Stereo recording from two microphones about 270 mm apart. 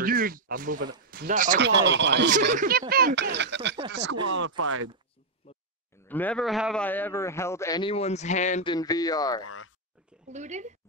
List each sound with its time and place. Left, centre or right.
0.0 s speech: right
6.0 s a man's voice: centre; by 8.7 s left
8.7 s a man's voice: centre
9.4 s speech: left
10.3 s speech: right